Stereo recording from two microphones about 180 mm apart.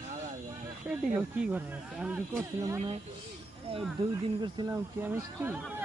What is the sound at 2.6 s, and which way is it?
Speech, 15° right (ahead or behind).